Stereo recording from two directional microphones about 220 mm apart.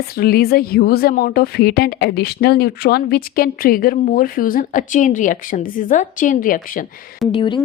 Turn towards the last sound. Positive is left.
turn(degrees=20)  # may be behind; listen again after turning